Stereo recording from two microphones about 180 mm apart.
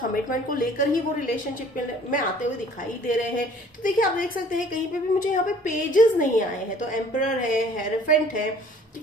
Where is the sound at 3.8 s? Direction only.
50° left (ahead or behind).